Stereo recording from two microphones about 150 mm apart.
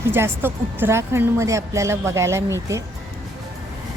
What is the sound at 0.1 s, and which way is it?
Speech, 15° right (ahead or behind).